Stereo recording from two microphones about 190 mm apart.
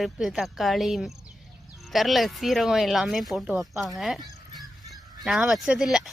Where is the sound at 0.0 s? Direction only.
Centre (ahead or behind).